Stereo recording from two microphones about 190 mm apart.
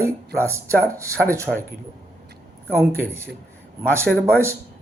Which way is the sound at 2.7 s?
15° right (ahead or behind).